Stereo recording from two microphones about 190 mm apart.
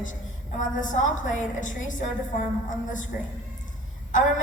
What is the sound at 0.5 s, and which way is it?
A woman's voice, 40° left (ahead or behind).